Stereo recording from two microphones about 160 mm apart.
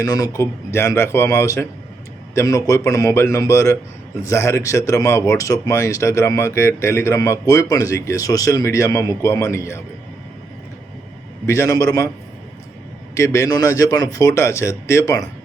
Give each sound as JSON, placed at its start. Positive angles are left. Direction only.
{"t": 0.0, "sound": "speech", "side_deg": 20}
{"t": 11.4, "sound": "speech", "side_deg": 20}
{"t": 13.1, "sound": "speech", "side_deg": 20}